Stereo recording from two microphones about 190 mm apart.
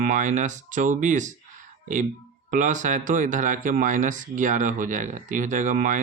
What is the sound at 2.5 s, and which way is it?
Speech, 40° right (ahead or behind).